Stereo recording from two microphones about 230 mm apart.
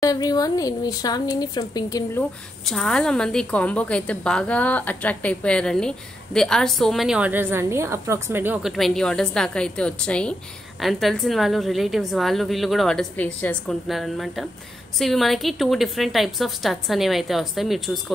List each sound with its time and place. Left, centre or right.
0.0 s speech: centre
2.6 s a woman's voice: centre